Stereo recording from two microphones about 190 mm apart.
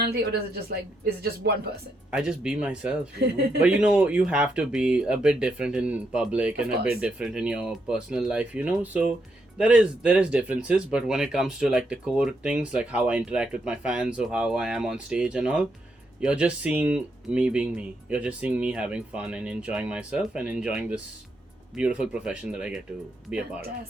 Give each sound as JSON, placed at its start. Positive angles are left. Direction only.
{"t": 0.0, "sound": "a woman's voice", "side_deg": -55}
{"t": 2.1, "sound": "speech", "side_deg": -5}